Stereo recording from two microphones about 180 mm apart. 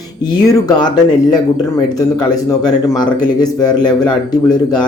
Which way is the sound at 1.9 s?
20° left (ahead or behind).